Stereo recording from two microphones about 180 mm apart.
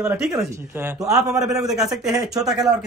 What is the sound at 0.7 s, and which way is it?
Speech, 15° right (ahead or behind).